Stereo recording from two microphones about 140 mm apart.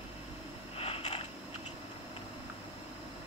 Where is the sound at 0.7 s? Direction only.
45° left (ahead or behind).